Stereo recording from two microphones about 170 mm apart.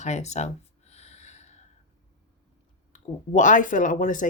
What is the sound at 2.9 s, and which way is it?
Speech, 50° left (ahead or behind).